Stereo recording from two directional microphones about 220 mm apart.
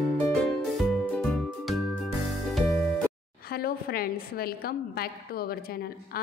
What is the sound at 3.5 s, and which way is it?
A woman's voice, 45° left (ahead or behind).